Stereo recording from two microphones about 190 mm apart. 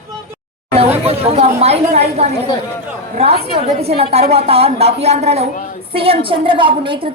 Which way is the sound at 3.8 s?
35° right (ahead or behind).